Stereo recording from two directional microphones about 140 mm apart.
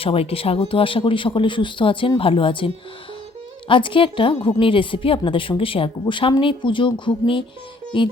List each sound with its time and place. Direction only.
0.0 s a woman's voice: 45° left (ahead or behind)